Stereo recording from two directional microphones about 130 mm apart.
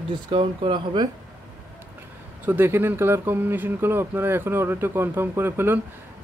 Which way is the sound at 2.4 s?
15° right (ahead or behind).